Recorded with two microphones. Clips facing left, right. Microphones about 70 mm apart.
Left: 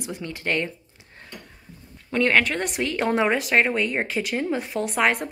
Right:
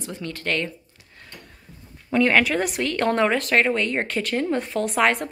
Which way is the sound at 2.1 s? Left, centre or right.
Centre.